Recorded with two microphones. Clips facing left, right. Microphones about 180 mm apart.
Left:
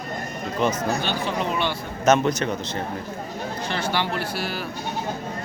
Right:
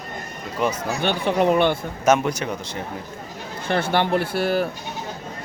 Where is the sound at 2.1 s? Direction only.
10° right (ahead or behind).